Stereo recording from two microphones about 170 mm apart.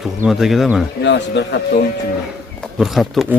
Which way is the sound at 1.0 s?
90° left.